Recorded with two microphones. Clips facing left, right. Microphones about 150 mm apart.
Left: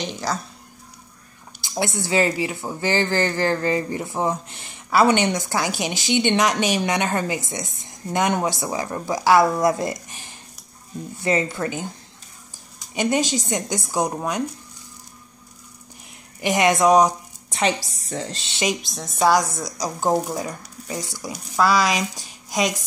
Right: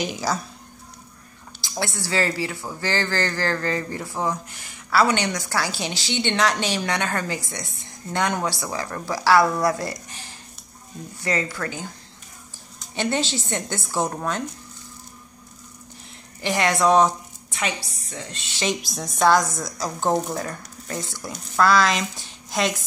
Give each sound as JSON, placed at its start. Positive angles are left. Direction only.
{"t": 0.0, "sound": "speech", "side_deg": -5}
{"t": 1.6, "sound": "a woman's voice", "side_deg": 20}
{"t": 16.3, "sound": "a woman's voice", "side_deg": 20}
{"t": 17.5, "sound": "music", "side_deg": 30}
{"t": 18.1, "sound": "speech", "side_deg": 30}
{"t": 18.8, "sound": "a woman's voice", "side_deg": 0}